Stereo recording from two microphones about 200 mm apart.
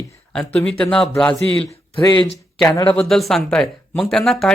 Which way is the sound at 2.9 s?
5° left (ahead or behind).